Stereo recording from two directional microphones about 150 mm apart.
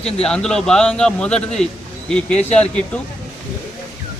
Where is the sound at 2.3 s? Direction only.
45° left (ahead or behind).